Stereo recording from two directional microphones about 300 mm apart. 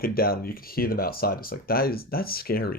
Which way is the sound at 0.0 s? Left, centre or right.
Left.